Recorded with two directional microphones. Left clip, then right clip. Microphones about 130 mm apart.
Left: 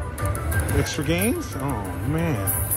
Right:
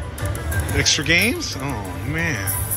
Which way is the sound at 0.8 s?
15° left (ahead or behind).